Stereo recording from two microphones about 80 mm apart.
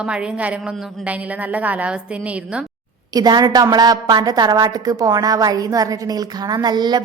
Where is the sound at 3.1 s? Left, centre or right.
Right.